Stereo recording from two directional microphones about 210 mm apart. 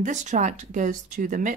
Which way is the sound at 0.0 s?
35° right (ahead or behind).